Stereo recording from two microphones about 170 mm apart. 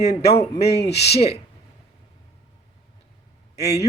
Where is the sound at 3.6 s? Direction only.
40° left (ahead or behind).